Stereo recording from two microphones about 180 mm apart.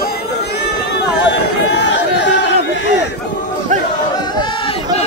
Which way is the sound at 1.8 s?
85° left.